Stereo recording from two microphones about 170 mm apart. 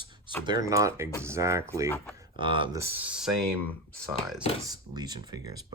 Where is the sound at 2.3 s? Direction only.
30° right (ahead or behind).